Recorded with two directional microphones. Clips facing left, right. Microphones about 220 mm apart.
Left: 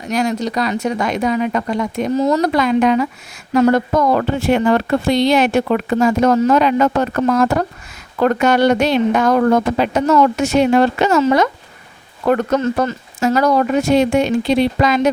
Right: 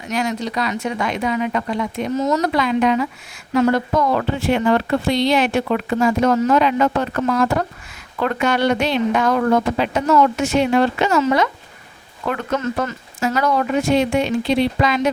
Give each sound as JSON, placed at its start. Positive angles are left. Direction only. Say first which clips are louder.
{"t": 0.1, "sound": "speech", "louder": "left 4 dB", "side_deg": 40}